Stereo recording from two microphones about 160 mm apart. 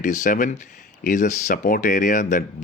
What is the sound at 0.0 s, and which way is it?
A man's voice, 55° left (ahead or behind).